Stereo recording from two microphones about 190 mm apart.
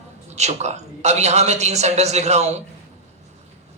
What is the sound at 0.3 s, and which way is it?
A man's voice, 35° right (ahead or behind).